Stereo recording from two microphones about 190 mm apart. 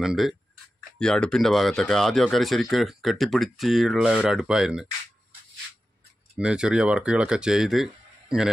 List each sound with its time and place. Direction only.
0.0 s speech: centre (ahead or behind)
6.3 s speech: 5° right (ahead or behind)